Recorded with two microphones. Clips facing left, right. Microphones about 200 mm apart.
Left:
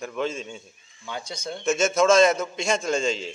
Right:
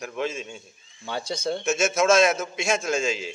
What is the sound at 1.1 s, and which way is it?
Speech, 30° right (ahead or behind).